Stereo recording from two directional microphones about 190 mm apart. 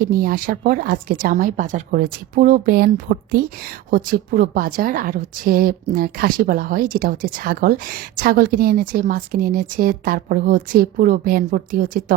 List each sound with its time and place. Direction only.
0.0 s a woman's voice: 50° right (ahead or behind)